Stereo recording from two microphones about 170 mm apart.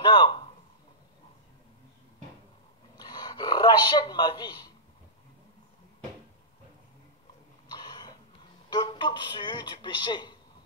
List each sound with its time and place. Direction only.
0.0 s a man's voice: 25° left (ahead or behind)
3.0 s a man's voice: 25° left (ahead or behind)
7.6 s cough: 25° left (ahead or behind)
8.6 s speech: 25° left (ahead or behind)